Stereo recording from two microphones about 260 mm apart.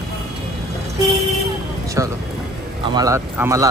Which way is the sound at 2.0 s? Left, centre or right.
Centre.